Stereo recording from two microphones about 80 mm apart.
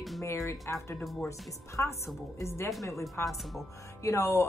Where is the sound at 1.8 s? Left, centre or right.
Left.